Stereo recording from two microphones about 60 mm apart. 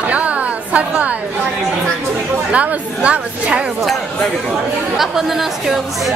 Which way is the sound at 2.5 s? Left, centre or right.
Right.